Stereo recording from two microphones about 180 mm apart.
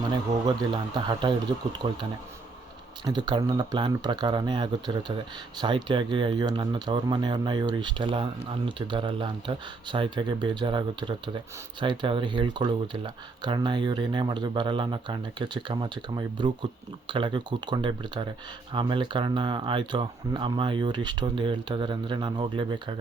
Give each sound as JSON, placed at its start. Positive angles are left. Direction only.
{"t": 0.1, "sound": "speech", "side_deg": -25}
{"t": 3.0, "sound": "speech", "side_deg": -25}